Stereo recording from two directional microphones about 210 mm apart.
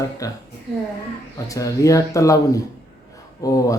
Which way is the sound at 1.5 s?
15° left (ahead or behind).